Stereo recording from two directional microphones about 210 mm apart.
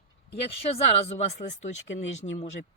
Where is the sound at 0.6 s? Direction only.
30° left (ahead or behind).